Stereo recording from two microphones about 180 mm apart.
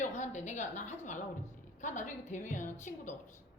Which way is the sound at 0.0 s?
40° left (ahead or behind).